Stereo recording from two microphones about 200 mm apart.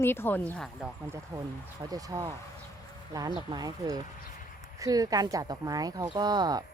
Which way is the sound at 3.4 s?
20° right (ahead or behind).